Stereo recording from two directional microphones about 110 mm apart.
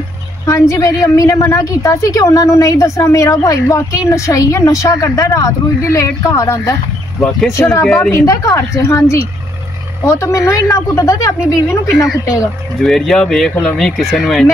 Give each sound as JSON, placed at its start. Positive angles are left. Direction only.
{"t": 0.5, "sound": "a woman's voice", "side_deg": 30}
{"t": 7.2, "sound": "speech", "side_deg": 5}
{"t": 7.5, "sound": "a woman's voice", "side_deg": 25}
{"t": 10.0, "sound": "a woman's voice", "side_deg": 25}
{"t": 12.8, "sound": "speech", "side_deg": 5}